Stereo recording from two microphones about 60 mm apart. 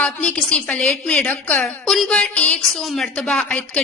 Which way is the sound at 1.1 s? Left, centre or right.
Left.